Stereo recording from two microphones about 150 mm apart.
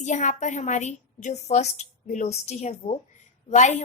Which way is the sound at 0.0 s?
55° left (ahead or behind).